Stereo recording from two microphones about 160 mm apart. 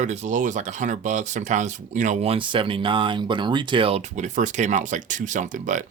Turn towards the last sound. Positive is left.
turn(degrees=-50)  # may be behind; listen again after turning